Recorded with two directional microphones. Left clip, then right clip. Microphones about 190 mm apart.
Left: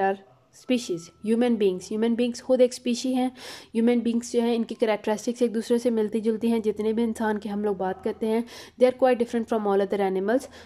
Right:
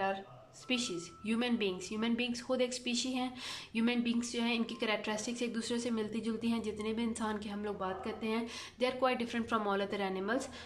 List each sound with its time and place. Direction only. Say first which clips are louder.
0.7 s a woman's voice: left 9 dB; 40° left (ahead or behind)